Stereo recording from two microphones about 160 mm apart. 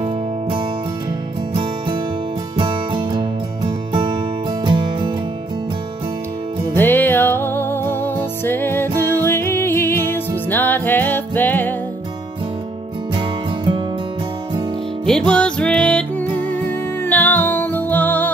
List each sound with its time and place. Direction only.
1.5 s music: 30° right (ahead or behind)
6.7 s music: 15° left (ahead or behind)
15.0 s music: 5° left (ahead or behind)